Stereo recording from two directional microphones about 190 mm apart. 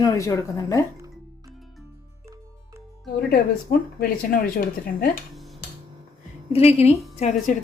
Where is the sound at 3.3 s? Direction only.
50° left (ahead or behind).